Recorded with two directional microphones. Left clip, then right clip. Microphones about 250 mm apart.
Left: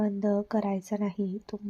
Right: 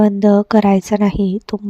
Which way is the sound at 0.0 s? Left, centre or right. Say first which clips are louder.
Right 16 dB; right.